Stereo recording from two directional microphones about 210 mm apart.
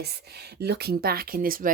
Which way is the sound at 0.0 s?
50° right (ahead or behind).